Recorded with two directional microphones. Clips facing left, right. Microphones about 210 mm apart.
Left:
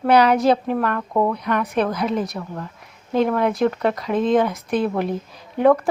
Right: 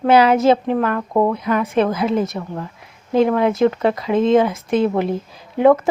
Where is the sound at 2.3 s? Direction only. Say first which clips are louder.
Right 3 dB; 25° right (ahead or behind).